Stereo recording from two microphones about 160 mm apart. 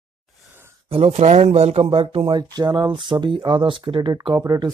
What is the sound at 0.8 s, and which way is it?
Speech, 40° right (ahead or behind).